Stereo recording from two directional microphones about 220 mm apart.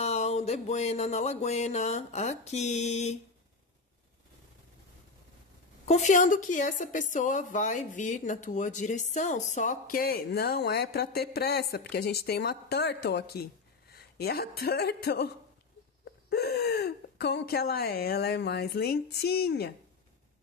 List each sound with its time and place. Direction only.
0.0 s a woman's voice: 30° left (ahead or behind)
5.9 s a woman's voice: 35° left (ahead or behind)